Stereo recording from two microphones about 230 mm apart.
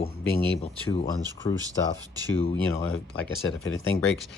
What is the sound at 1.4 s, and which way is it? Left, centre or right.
Speech, centre.